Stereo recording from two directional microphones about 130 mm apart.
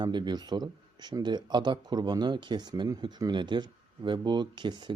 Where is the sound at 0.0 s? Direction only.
35° right (ahead or behind).